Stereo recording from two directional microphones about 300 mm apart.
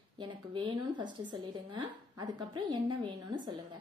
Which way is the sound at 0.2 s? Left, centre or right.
Centre.